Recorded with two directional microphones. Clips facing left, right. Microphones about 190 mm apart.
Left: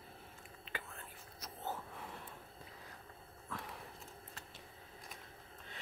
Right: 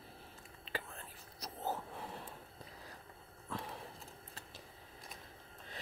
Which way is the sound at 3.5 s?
30° right (ahead or behind).